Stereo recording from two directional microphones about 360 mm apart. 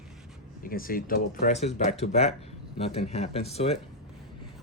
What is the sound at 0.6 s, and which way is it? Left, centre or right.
Speech, left.